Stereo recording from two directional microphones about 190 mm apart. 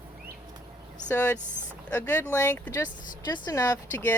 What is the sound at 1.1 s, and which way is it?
Speech, 10° left (ahead or behind).